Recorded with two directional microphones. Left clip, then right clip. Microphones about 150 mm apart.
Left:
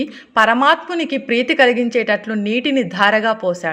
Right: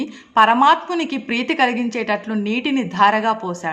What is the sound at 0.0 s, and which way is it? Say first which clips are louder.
A woman's voice: even; 30° left (ahead or behind).